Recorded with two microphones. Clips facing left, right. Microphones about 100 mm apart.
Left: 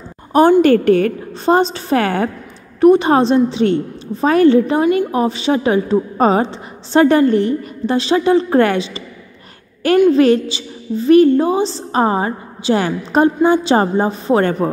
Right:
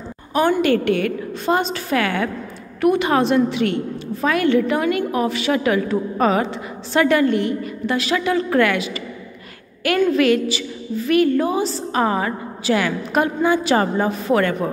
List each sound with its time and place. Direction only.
0.6 s a woman's voice: 40° left (ahead or behind)
10.1 s a woman's voice: 30° left (ahead or behind)